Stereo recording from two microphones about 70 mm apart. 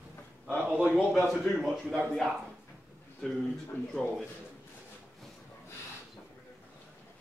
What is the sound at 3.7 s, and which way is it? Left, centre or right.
Speech, left.